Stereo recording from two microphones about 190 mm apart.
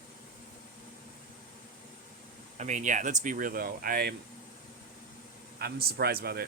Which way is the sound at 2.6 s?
40° right (ahead or behind).